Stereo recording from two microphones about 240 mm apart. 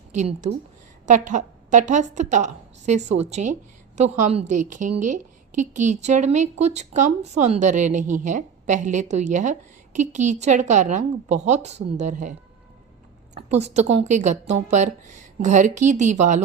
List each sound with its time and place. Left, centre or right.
0.1 s a woman's voice: right
13.3 s a woman's voice: right